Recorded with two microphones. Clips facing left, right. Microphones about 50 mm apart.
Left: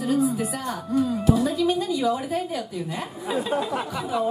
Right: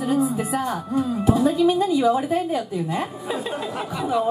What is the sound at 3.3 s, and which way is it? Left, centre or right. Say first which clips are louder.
Speech: left 2 dB; centre.